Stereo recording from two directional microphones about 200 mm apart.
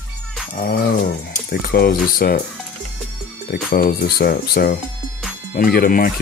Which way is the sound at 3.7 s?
50° left (ahead or behind).